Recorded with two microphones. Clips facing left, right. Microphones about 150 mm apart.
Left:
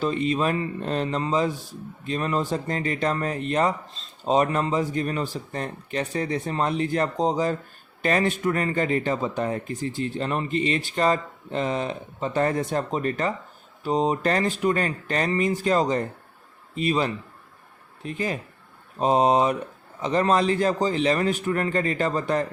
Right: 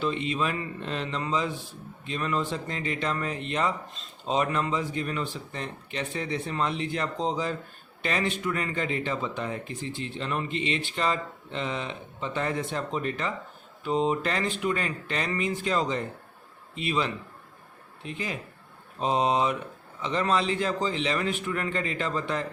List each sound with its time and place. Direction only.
0.0 s speech: 40° left (ahead or behind)